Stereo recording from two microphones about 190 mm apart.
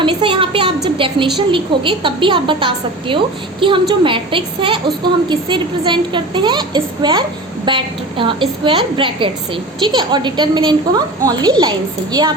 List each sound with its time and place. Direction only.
0.0 s a woman's voice: 25° right (ahead or behind)